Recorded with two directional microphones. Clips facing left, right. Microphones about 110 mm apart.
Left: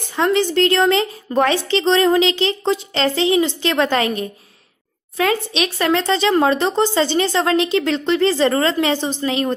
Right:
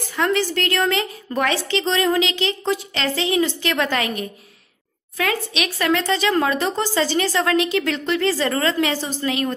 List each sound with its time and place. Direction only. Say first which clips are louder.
0.1 s a woman's voice: left 4 dB; 25° left (ahead or behind)